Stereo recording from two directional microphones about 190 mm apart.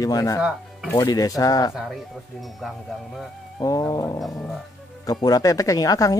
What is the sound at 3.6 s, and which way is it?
Speech, 20° left (ahead or behind).